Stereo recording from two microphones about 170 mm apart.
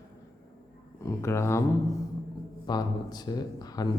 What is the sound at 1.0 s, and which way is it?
Speech, 15° left (ahead or behind).